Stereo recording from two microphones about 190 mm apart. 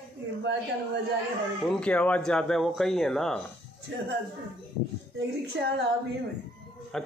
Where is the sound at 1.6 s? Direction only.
5° left (ahead or behind).